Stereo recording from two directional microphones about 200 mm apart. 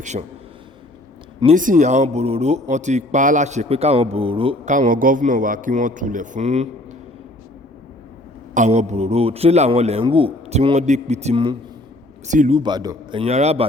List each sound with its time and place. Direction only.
0.0 s a man's voice: 35° right (ahead or behind)
1.5 s a man's voice: 40° right (ahead or behind)
4.7 s a man's voice: 40° right (ahead or behind)
8.5 s a man's voice: 35° right (ahead or behind)
12.5 s a man's voice: 20° right (ahead or behind)